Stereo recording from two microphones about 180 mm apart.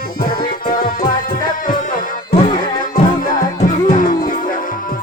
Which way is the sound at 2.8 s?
50° left (ahead or behind).